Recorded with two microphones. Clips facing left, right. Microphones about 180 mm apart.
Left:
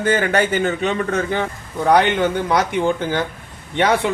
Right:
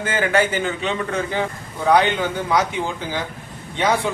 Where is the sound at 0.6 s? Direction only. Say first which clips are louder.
Left 4 dB; 45° left (ahead or behind).